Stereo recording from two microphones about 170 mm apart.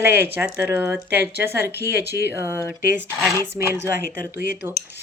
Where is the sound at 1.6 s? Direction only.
70° left (ahead or behind).